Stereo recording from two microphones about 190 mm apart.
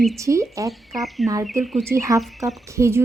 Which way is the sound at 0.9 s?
Centre (ahead or behind).